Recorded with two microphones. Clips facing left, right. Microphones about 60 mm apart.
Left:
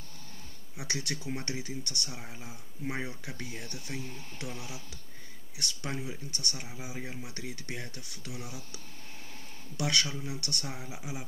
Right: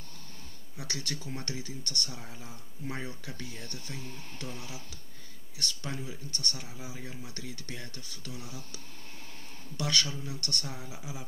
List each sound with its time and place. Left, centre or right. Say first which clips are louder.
0.7 s speech: left 2 dB; centre
9.8 s speech: left 1 dB; centre